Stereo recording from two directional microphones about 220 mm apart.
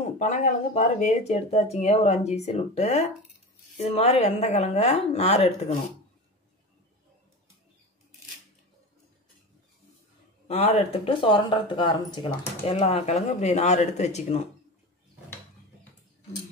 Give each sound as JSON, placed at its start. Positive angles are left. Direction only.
{"t": 0.0, "sound": "speech", "side_deg": 35}
{"t": 10.5, "sound": "speech", "side_deg": 30}